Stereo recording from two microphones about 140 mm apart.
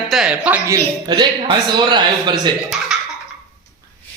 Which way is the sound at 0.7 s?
30° right (ahead or behind).